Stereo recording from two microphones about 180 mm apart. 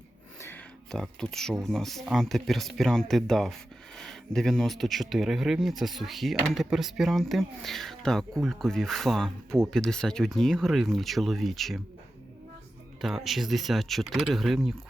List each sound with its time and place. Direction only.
0.4 s a sound: 5° left (ahead or behind)
1.6 s speech: centre (ahead or behind)
13.0 s speech: centre (ahead or behind)